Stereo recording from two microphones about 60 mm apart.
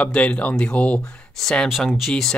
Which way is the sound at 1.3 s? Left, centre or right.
Centre.